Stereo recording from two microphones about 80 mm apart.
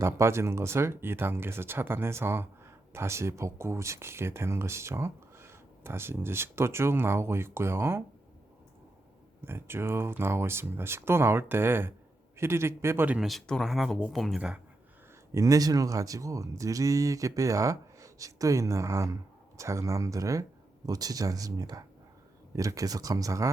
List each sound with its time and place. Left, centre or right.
0.0 s speech: right
9.4 s speech: right
13.2 s speech: centre
15.3 s speech: right